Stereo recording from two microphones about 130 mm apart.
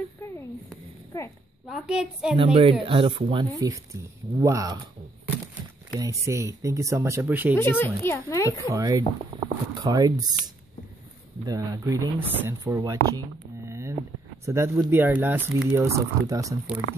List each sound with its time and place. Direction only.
1.7 s a woman's voice: 5° right (ahead or behind)
2.3 s speech: 45° right (ahead or behind)
3.5 s speech: 25° right (ahead or behind)
5.9 s speech: 25° right (ahead or behind)
7.5 s a woman's voice: 15° left (ahead or behind)
8.6 s speech: 25° right (ahead or behind)
13.7 s a sound: 20° right (ahead or behind)
14.4 s speech: 20° right (ahead or behind)